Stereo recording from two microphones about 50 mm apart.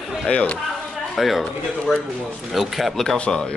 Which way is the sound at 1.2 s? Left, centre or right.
Centre.